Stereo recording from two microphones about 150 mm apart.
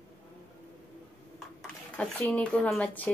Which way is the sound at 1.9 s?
5° left (ahead or behind).